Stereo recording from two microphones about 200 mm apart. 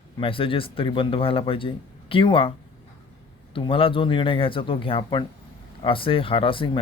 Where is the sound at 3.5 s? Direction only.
25° left (ahead or behind).